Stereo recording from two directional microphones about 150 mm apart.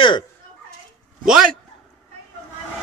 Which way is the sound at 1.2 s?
5° right (ahead or behind).